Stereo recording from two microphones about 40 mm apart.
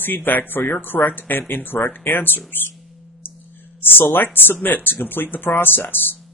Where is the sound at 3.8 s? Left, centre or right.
Left.